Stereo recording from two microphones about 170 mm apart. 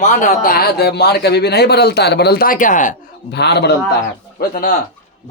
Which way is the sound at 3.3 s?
80° left.